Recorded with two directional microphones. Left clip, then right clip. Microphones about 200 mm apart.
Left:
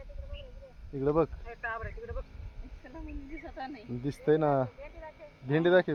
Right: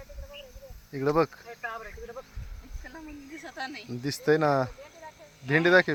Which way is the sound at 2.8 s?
Centre (ahead or behind).